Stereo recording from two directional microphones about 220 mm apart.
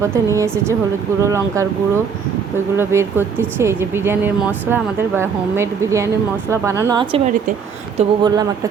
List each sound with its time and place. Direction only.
0.0 s speech: 15° right (ahead or behind)
2.7 s speech: 10° right (ahead or behind)